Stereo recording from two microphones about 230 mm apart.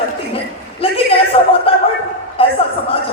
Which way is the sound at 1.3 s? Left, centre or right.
Left.